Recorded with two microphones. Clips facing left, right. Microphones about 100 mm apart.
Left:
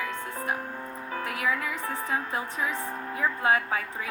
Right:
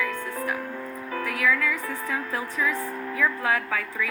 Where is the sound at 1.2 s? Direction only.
35° left (ahead or behind).